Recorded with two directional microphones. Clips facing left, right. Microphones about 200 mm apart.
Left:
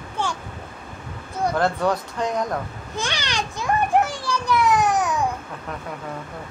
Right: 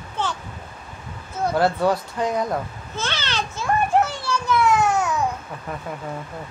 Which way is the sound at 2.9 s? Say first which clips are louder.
Even; 15° left (ahead or behind).